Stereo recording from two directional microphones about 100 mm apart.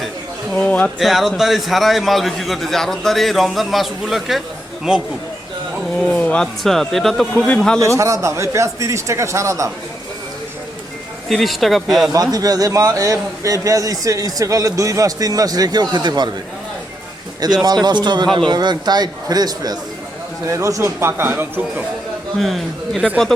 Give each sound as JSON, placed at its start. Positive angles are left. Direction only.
{"t": 0.6, "sound": "speech", "side_deg": 15}
{"t": 0.9, "sound": "a man's voice", "side_deg": 0}
{"t": 6.0, "sound": "a man's voice", "side_deg": 15}
{"t": 7.8, "sound": "a man's voice", "side_deg": -30}
{"t": 11.3, "sound": "a man's voice", "side_deg": 0}
{"t": 12.1, "sound": "a man's voice", "side_deg": -40}
{"t": 17.4, "sound": "a man's voice", "side_deg": -40}
{"t": 22.4, "sound": "a man's voice", "side_deg": 0}